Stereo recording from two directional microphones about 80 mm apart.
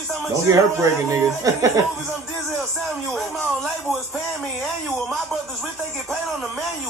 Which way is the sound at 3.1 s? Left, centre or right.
Centre.